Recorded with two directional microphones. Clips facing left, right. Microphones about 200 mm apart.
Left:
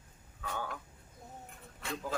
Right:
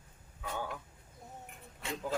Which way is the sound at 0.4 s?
15° right (ahead or behind).